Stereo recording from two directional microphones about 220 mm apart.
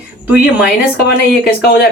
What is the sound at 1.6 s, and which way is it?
Speech, 45° left (ahead or behind).